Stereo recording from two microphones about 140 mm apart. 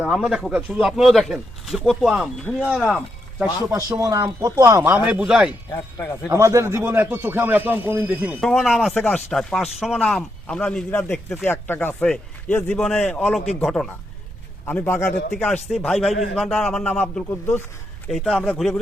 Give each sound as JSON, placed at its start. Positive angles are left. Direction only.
{"t": 0.0, "sound": "speech", "side_deg": 0}
{"t": 3.7, "sound": "speech", "side_deg": -15}
{"t": 5.7, "sound": "speech", "side_deg": 15}
{"t": 6.3, "sound": "speech", "side_deg": -20}
{"t": 8.4, "sound": "speech", "side_deg": 0}
{"t": 18.1, "sound": "speech", "side_deg": 0}